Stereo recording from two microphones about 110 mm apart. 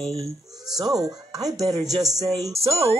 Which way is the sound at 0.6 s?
35° right (ahead or behind).